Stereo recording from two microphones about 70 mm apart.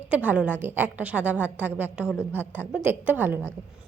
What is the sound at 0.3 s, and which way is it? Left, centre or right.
A woman's voice, right.